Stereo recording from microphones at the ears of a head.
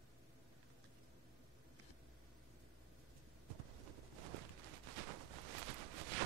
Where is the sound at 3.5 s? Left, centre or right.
Right.